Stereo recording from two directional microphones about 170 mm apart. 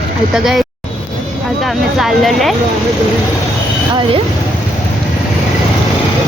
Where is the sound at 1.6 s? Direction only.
Centre (ahead or behind).